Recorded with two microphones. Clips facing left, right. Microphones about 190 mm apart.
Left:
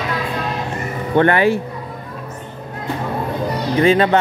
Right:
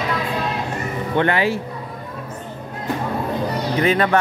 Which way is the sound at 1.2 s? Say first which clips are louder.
Left 5 dB; 55° left (ahead or behind).